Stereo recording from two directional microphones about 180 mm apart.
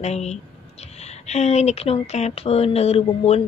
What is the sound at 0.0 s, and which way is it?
Speech, 40° left (ahead or behind).